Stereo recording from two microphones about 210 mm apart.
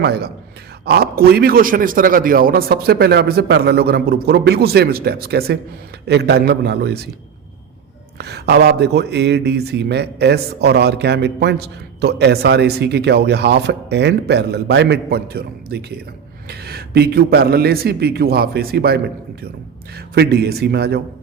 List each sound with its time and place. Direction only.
0.0 s a man's voice: 50° right (ahead or behind)
8.2 s a man's voice: 50° right (ahead or behind)